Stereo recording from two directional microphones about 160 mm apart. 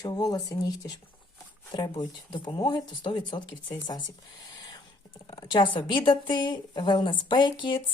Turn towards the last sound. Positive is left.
turn(degrees=30)  # may be behind; listen again after turning